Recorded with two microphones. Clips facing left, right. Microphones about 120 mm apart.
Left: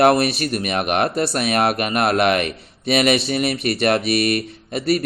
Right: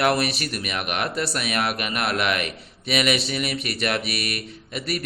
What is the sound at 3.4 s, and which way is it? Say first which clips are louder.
Speech: left 7 dB; 30° left (ahead or behind).